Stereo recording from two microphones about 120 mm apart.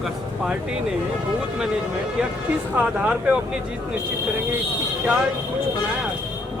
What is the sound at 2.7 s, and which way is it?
Speech, 10° right (ahead or behind).